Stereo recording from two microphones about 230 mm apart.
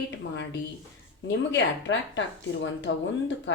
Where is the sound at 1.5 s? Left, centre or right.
Left.